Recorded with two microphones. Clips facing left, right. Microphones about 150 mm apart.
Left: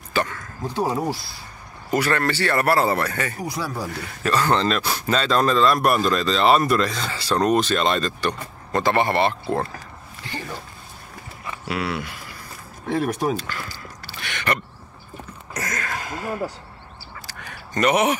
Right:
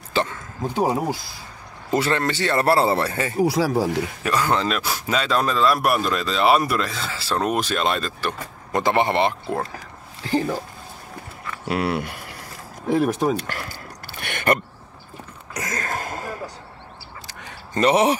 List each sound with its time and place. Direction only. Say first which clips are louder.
0.1 s speech: right 1 dB; 25° right (ahead or behind)
3.4 s speech: right 8 dB; 90° right
4.2 s a man's voice: left 3 dB; 10° right (ahead or behind)
8.7 s speech: even; 20° right (ahead or behind)
11.6 s speech: right 4 dB; 45° right (ahead or behind)
12.9 s speech: right 3 dB; 5° right (ahead or behind)
13.4 s a sound: right 1 dB; 60° right (ahead or behind)
15.7 s a sound: right 4 dB; 40° right (ahead or behind)
17.3 s a sound: right 1 dB; 20° right (ahead or behind)